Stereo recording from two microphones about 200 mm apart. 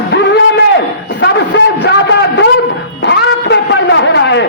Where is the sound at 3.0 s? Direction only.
65° left (ahead or behind).